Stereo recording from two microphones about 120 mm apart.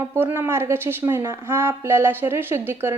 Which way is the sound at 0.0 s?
20° right (ahead or behind).